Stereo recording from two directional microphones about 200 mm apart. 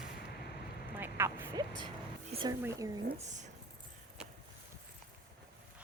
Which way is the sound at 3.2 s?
35° right (ahead or behind).